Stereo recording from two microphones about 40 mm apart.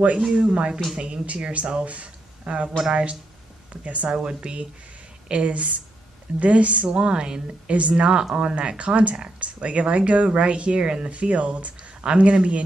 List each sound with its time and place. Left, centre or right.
0.2 s a woman's voice: right